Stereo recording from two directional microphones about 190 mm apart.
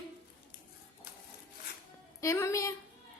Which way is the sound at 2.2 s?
15° left (ahead or behind).